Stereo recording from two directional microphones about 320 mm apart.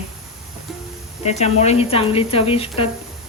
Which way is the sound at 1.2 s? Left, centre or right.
Centre.